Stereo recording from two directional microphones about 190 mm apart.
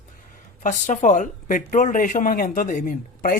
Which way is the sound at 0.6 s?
40° left (ahead or behind).